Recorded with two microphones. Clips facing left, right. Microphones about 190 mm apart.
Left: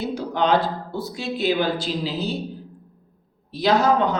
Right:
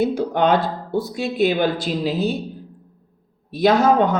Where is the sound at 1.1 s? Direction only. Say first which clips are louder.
Right 2 dB; 55° right (ahead or behind).